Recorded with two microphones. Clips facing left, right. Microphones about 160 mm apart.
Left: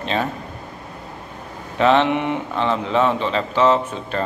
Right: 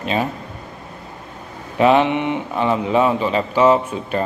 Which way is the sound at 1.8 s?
10° right (ahead or behind).